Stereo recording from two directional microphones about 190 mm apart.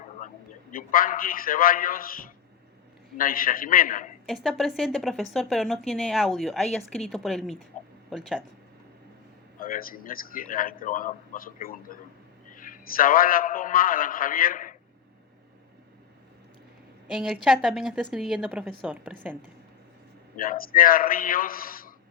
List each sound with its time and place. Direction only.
0.7 s a man's voice: 50° left (ahead or behind)
4.3 s speech: centre (ahead or behind)
9.6 s a man's voice: 50° left (ahead or behind)
17.1 s a woman's voice: 5° right (ahead or behind)
20.3 s a man's voice: 45° left (ahead or behind)